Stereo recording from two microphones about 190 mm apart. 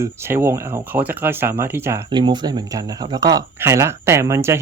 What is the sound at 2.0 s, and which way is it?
Speech, 25° right (ahead or behind).